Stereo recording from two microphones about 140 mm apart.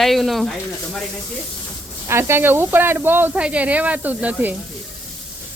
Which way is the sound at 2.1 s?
20° right (ahead or behind).